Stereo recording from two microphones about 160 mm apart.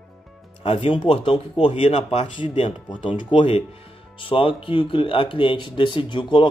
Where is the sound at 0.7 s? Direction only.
35° left (ahead or behind).